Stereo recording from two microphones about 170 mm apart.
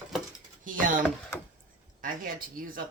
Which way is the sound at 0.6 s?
50° right (ahead or behind).